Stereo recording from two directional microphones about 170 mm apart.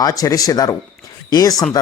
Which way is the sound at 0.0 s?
20° left (ahead or behind).